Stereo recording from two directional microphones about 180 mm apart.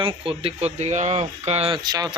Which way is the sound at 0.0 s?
30° right (ahead or behind).